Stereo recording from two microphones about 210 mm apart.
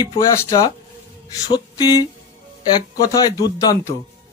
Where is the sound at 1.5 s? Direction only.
20° left (ahead or behind).